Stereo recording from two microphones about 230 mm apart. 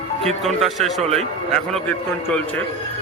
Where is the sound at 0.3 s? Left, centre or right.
Centre.